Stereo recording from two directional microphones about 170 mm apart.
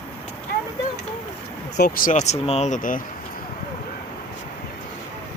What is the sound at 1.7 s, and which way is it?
Speech, 60° left (ahead or behind).